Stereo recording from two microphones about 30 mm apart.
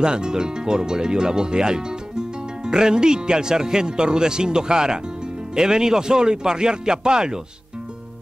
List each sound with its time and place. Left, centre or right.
0.0 s speech: right